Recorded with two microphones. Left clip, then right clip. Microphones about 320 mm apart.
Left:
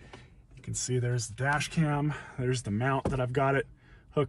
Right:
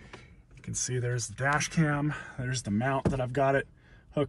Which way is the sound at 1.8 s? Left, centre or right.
Left.